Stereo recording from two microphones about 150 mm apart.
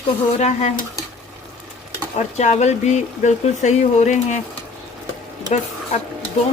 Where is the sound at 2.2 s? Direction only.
50° left (ahead or behind).